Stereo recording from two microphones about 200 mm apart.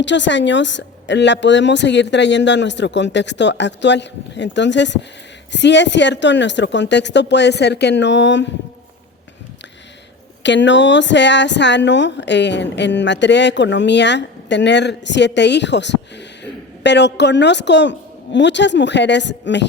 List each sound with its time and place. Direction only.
0.0 s speech: 65° left (ahead or behind)
10.4 s a woman's voice: 65° left (ahead or behind)